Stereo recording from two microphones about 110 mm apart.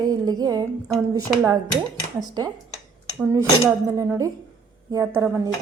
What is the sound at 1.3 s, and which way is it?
Speech, 10° right (ahead or behind).